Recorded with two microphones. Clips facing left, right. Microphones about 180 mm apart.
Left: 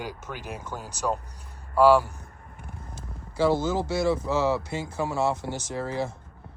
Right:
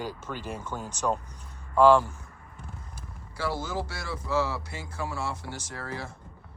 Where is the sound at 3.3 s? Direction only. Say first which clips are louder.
Left 8 dB; 25° left (ahead or behind).